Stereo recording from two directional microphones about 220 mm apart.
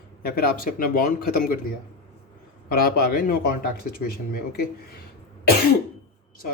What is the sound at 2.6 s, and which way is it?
Speech, 45° left (ahead or behind).